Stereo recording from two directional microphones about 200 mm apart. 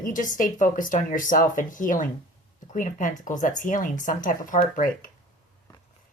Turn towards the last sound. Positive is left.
turn(degrees=40)  # may be behind; listen again after turning